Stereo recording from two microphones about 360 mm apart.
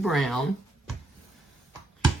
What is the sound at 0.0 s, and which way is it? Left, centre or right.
Speech, centre.